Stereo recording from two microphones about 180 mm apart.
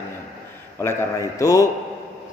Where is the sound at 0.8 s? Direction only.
15° left (ahead or behind).